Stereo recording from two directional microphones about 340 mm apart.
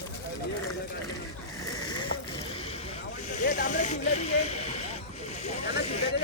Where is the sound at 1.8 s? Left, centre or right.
Centre.